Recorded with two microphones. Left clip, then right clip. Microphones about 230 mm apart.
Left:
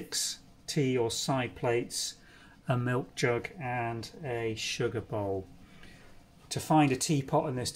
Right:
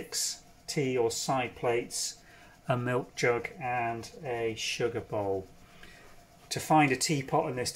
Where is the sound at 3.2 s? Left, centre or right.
Centre.